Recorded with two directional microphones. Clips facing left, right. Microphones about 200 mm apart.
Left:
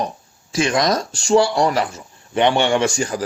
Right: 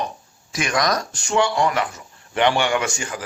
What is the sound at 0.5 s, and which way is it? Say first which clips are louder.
Speech: left 4 dB; 25° left (ahead or behind).